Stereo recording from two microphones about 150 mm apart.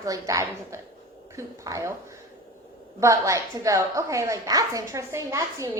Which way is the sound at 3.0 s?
20° right (ahead or behind).